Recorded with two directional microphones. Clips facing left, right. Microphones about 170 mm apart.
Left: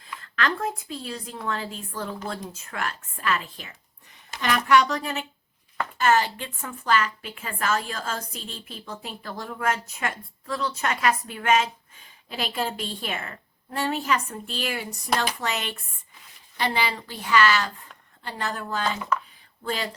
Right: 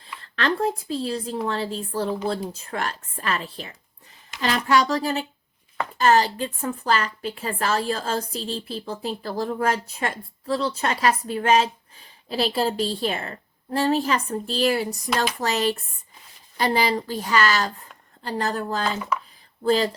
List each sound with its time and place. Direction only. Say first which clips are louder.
0.2 s a woman's voice: right 4 dB; 30° right (ahead or behind)